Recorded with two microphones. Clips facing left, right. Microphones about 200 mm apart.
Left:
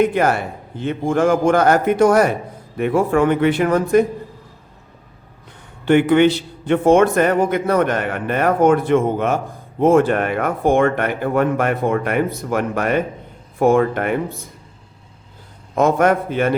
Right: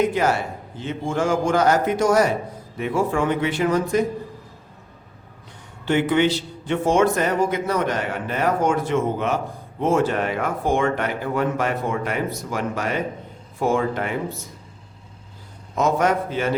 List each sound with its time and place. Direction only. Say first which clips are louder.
0.0 s a man's voice: left 4 dB; 55° left (ahead or behind)
5.8 s a man's voice: left 6 dB; 55° left (ahead or behind)
15.7 s a man's voice: left 5 dB; 55° left (ahead or behind)